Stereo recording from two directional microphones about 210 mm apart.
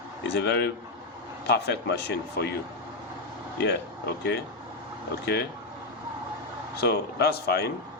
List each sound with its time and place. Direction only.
0.2 s speech: 55° left (ahead or behind)
3.6 s speech: 50° left (ahead or behind)
6.7 s speech: 50° left (ahead or behind)